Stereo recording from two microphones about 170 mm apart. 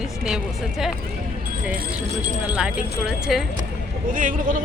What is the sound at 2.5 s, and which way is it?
Speech, 5° right (ahead or behind).